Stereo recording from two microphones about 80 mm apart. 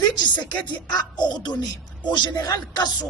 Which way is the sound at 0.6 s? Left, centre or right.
Left.